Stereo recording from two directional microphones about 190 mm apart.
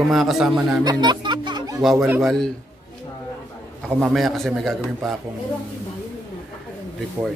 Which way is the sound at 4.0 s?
Centre (ahead or behind).